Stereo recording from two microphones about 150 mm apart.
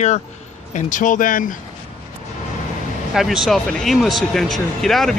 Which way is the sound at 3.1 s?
Centre (ahead or behind).